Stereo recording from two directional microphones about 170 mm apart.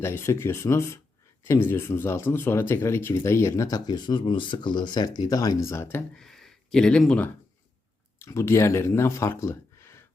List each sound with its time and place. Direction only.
0.0 s speech: 15° left (ahead or behind)
6.1 s speech: centre (ahead or behind)
8.2 s speech: 15° left (ahead or behind)